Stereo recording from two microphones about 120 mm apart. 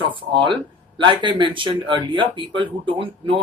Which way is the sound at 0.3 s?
45° right (ahead or behind).